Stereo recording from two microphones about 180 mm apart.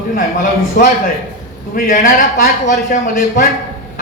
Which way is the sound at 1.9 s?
45° left (ahead or behind).